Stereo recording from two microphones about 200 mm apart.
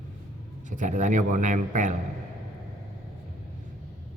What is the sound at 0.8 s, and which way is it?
A man's voice, 40° right (ahead or behind).